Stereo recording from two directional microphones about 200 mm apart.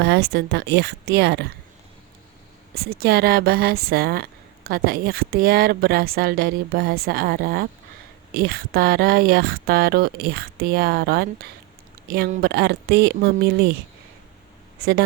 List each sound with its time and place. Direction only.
0.0 s speech: 55° right (ahead or behind)
2.7 s speech: 50° right (ahead or behind)
14.8 s speech: 55° right (ahead or behind)